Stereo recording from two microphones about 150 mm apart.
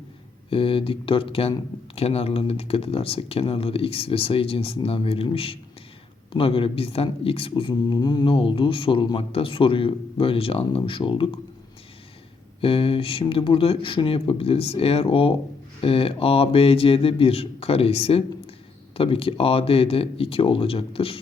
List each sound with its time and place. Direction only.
0.5 s speech: 35° left (ahead or behind)
12.6 s speech: 40° left (ahead or behind)